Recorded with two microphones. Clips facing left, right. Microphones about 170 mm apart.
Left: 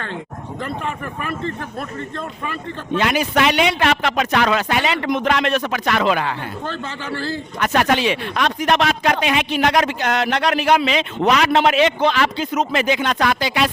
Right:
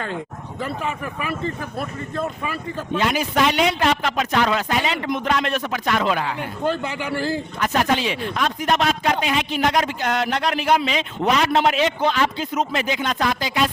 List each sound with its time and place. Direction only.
0.6 s speech: 5° right (ahead or behind)
3.0 s speech: 70° left (ahead or behind)
6.7 s speech: 15° right (ahead or behind)
7.6 s speech: 75° left (ahead or behind)